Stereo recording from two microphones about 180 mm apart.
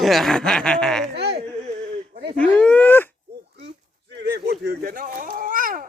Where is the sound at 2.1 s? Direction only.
30° right (ahead or behind).